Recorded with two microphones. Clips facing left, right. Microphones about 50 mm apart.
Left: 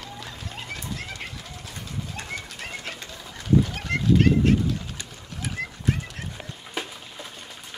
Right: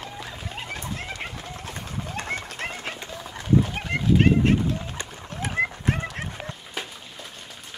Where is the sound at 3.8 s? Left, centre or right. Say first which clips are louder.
Right 1 dB; centre; by 6.5 s right.